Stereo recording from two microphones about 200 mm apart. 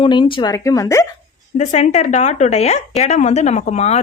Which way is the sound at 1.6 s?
35° left (ahead or behind).